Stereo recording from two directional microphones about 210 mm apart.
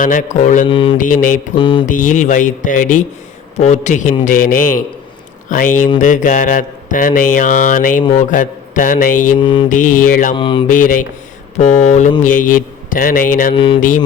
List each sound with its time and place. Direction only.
0.0 s speech: 40° left (ahead or behind)
0.7 s mantra: 25° left (ahead or behind)
0.9 s speech: 40° left (ahead or behind)
1.5 s mantra: 25° left (ahead or behind)
1.9 s speech: 40° left (ahead or behind)
9.4 s mantra: 25° left (ahead or behind)
9.6 s speech: 40° left (ahead or behind)
10.3 s mantra: 25° left (ahead or behind)
10.7 s speech: 40° left (ahead or behind)
13.5 s mantra: 25° left (ahead or behind)
13.7 s speech: 35° left (ahead or behind)